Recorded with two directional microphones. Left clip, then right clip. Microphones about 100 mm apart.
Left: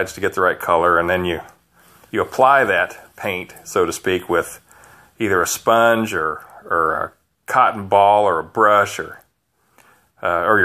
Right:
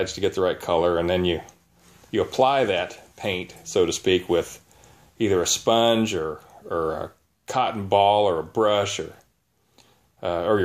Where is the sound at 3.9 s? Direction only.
55° left (ahead or behind).